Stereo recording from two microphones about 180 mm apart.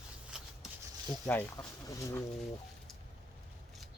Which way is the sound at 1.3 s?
10° left (ahead or behind).